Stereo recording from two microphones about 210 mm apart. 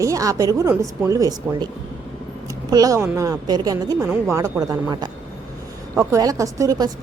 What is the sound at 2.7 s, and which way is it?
A woman's voice, 15° right (ahead or behind).